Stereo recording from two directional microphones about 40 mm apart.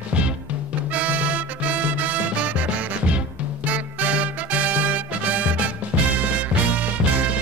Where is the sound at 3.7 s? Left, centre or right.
Right.